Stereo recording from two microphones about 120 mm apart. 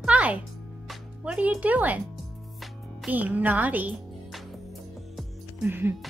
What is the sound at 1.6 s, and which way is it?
Speech, 15° right (ahead or behind).